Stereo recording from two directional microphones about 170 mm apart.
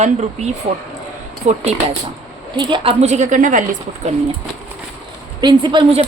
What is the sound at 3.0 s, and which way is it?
A woman's voice, 45° right (ahead or behind).